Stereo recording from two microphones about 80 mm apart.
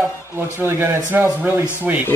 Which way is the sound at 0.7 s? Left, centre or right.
Right.